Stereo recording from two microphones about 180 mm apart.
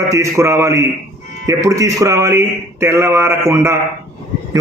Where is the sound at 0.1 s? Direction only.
15° right (ahead or behind).